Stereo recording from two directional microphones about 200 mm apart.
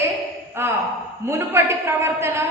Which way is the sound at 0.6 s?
10° right (ahead or behind).